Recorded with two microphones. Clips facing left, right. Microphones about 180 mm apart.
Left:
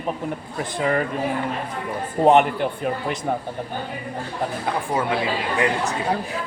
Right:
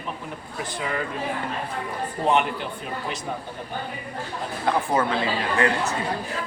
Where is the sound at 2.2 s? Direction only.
50° left (ahead or behind).